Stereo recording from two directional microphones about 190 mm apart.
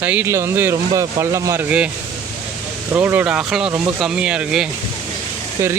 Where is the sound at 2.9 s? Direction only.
10° right (ahead or behind).